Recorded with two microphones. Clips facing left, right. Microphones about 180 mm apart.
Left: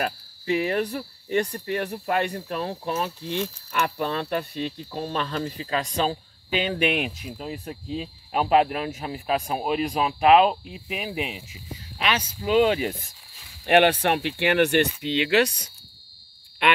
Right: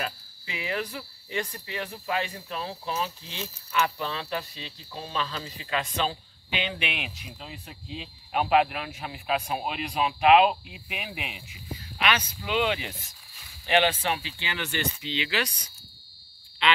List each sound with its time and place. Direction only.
0.0 s speech: 50° left (ahead or behind)
5.6 s speech: 40° left (ahead or behind)
13.7 s speech: 60° left (ahead or behind)